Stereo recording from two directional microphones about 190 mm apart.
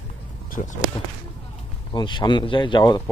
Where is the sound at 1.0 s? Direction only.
30° left (ahead or behind).